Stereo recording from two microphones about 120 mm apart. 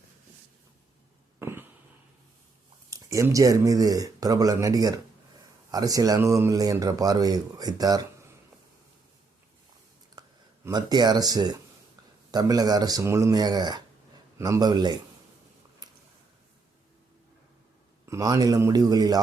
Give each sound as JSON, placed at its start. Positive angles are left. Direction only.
{"t": 1.4, "sound": "a sound", "side_deg": -20}
{"t": 2.9, "sound": "speech", "side_deg": -25}
{"t": 10.7, "sound": "speech", "side_deg": -35}
{"t": 18.0, "sound": "speech", "side_deg": -25}